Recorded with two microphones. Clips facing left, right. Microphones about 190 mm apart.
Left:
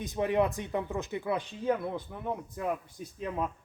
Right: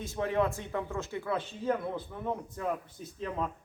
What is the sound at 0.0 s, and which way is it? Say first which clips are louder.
A man's voice: left 2 dB; 15° left (ahead or behind).